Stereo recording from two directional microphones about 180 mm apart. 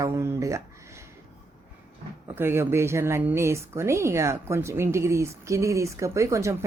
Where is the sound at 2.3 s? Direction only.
10° right (ahead or behind).